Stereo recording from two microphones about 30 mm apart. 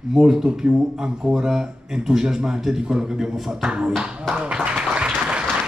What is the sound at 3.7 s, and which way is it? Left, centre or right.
Speech, right.